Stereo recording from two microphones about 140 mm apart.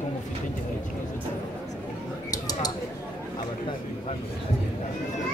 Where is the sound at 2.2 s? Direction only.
25° left (ahead or behind).